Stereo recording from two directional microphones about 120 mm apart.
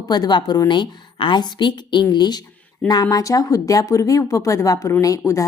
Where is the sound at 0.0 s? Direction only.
35° left (ahead or behind).